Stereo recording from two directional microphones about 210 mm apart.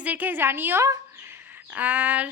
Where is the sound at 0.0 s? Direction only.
5° right (ahead or behind).